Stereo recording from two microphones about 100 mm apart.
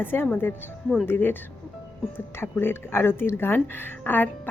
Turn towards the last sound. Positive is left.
turn(degrees=20)  # may be behind; listen again after turning